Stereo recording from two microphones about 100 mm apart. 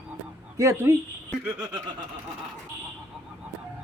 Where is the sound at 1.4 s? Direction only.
10° right (ahead or behind).